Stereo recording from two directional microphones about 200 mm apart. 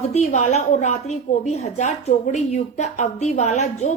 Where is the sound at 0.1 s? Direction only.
35° left (ahead or behind).